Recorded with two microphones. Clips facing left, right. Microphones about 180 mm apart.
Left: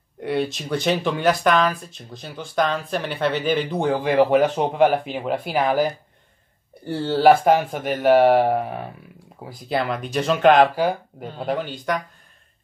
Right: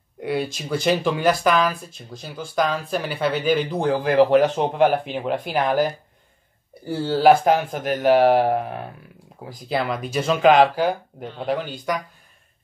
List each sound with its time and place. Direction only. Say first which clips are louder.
0.2 s speech: left 1 dB; 5° right (ahead or behind)